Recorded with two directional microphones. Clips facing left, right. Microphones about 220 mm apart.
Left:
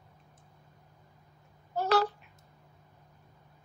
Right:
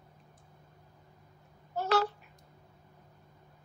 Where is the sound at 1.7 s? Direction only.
35° left (ahead or behind).